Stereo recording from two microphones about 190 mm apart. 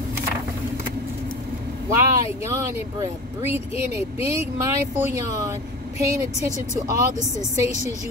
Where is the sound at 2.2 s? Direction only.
15° right (ahead or behind).